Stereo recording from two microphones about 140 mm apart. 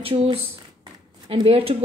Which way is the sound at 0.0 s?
40° right (ahead or behind).